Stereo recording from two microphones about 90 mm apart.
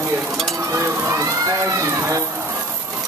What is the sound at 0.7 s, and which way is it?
Frying, 30° right (ahead or behind).